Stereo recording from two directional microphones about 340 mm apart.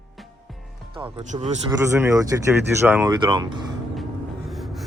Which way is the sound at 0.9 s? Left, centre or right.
Centre.